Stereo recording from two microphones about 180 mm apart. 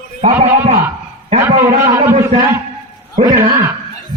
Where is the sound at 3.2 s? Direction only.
20° right (ahead or behind).